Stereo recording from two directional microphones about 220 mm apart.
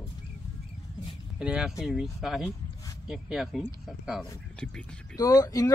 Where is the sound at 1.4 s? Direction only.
5° right (ahead or behind).